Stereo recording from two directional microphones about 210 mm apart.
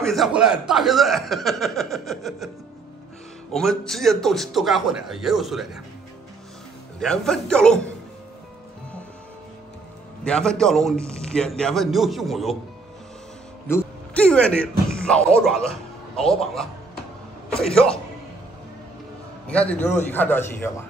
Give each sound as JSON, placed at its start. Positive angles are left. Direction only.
{"t": 0.0, "sound": "speech", "side_deg": 0}
{"t": 3.5, "sound": "speech", "side_deg": 0}
{"t": 7.0, "sound": "speech", "side_deg": 5}
{"t": 10.2, "sound": "speech", "side_deg": 5}
{"t": 13.7, "sound": "music", "side_deg": 10}
{"t": 15.6, "sound": "music", "side_deg": 30}
{"t": 16.3, "sound": "speech", "side_deg": 0}
{"t": 19.4, "sound": "a man's voice", "side_deg": 5}